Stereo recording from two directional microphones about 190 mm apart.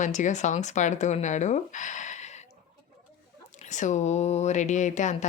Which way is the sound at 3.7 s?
40° left (ahead or behind).